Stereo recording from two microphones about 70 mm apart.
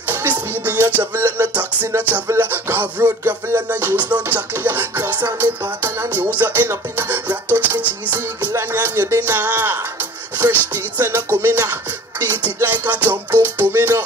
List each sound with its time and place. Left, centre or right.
0.1 s music: right